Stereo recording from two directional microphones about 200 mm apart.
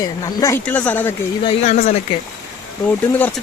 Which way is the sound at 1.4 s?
30° left (ahead or behind).